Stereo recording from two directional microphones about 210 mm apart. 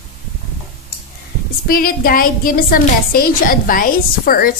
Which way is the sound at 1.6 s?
45° left (ahead or behind).